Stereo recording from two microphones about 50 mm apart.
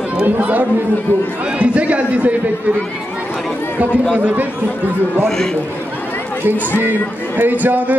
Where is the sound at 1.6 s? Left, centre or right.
Right.